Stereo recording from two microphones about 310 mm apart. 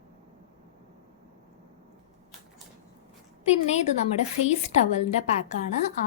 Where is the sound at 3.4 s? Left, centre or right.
Left.